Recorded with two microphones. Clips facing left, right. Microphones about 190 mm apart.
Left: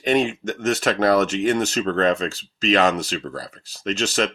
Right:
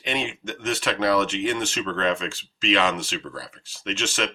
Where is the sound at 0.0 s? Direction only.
40° left (ahead or behind).